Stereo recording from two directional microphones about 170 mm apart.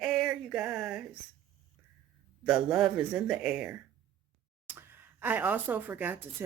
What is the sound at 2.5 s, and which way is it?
Speech, 5° right (ahead or behind).